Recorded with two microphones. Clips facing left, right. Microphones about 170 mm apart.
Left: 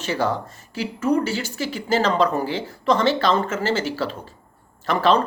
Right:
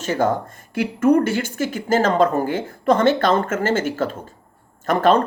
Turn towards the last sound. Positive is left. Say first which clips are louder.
# right 3 dB
turn(degrees=-50)  # may be behind; listen again after turning